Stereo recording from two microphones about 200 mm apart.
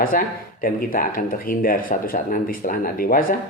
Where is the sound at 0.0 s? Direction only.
45° left (ahead or behind).